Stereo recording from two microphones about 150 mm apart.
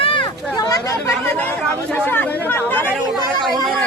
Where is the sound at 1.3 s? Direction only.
10° left (ahead or behind).